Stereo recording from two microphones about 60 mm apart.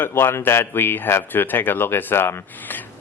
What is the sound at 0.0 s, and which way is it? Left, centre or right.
Speech, left.